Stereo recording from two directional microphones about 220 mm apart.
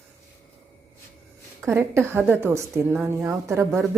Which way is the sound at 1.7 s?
10° right (ahead or behind).